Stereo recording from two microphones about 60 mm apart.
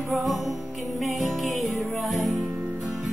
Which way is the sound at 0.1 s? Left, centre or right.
Centre.